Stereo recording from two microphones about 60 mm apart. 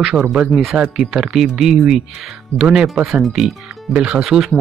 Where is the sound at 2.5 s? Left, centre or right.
Centre.